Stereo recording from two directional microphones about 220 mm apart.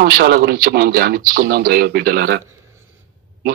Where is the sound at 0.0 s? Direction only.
45° right (ahead or behind).